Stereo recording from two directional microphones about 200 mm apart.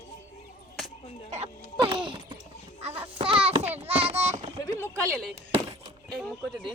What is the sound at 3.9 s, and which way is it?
Child singing, 30° right (ahead or behind).